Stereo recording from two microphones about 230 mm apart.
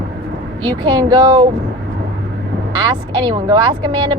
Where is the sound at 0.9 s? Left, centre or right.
Centre.